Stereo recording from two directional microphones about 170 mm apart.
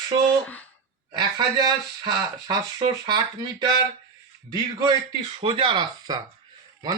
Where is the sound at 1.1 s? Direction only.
25° right (ahead or behind).